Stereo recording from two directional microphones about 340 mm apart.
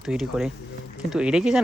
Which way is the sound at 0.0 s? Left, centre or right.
Centre.